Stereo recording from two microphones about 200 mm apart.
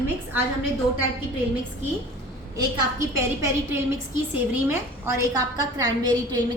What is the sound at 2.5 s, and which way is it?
A woman's voice, 15° right (ahead or behind).